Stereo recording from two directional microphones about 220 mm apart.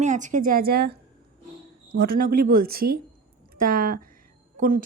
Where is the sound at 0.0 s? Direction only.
35° right (ahead or behind).